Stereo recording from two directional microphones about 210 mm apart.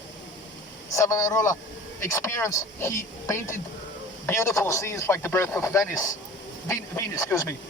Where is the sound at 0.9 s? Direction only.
15° left (ahead or behind).